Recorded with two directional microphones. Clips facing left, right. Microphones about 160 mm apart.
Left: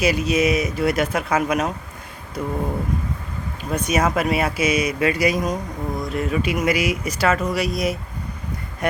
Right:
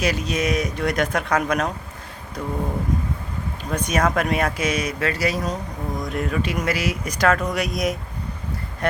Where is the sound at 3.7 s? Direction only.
10° left (ahead or behind).